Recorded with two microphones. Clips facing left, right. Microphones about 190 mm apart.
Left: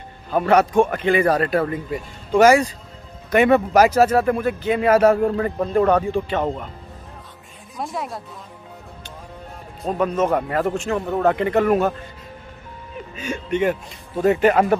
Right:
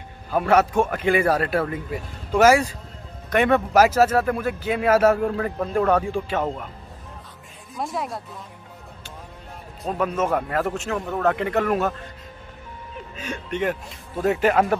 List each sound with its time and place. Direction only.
0.3 s speech: 5° right (ahead or behind)
7.7 s speech: centre (ahead or behind)
9.8 s speech: 5° right (ahead or behind)
13.1 s speech: centre (ahead or behind)